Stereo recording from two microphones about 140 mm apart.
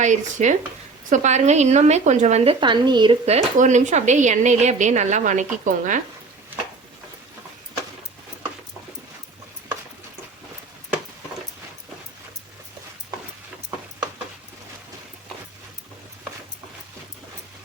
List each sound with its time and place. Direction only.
0.0 s a woman's voice: 60° right (ahead or behind); by 3.2 s 35° right (ahead or behind)
3.2 s a woman's voice: 55° right (ahead or behind)